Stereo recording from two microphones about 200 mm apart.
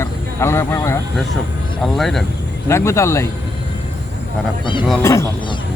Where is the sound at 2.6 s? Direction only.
15° left (ahead or behind).